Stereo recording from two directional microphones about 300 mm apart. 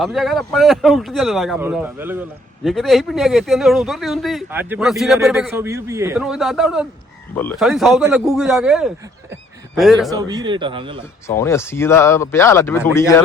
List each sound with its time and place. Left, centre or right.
0.0 s speech: centre
9.3 s a sound: centre
10.1 s a man's voice: centre
11.3 s speech: centre